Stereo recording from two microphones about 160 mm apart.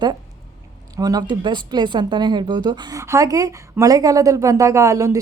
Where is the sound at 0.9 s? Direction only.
25° right (ahead or behind).